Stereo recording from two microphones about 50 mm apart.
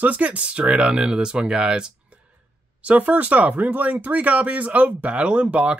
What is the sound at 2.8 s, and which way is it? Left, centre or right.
Speech, right.